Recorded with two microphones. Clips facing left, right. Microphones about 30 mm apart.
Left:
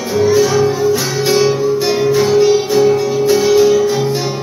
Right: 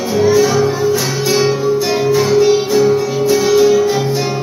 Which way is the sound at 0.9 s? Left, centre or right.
Left.